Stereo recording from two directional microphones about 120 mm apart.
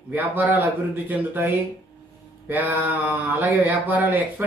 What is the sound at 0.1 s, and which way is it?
Mantra, 15° right (ahead or behind).